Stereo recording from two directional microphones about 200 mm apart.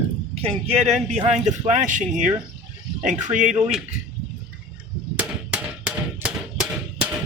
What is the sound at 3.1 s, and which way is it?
Speech, 5° right (ahead or behind).